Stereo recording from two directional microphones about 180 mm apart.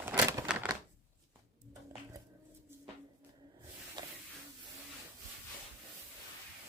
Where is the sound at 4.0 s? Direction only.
25° right (ahead or behind).